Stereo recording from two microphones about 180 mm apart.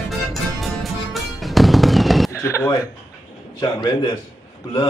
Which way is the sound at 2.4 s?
15° left (ahead or behind).